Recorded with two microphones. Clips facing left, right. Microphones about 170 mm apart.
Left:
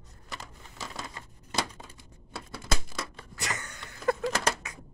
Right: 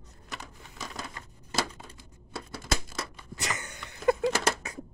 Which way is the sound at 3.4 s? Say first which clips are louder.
Right 1 dB; 20° right (ahead or behind).